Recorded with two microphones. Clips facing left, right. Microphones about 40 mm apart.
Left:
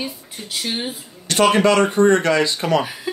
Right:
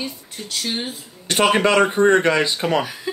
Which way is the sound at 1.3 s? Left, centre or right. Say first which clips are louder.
Left 1 dB; centre.